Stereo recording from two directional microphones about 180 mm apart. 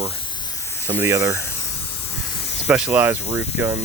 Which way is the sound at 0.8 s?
10° right (ahead or behind).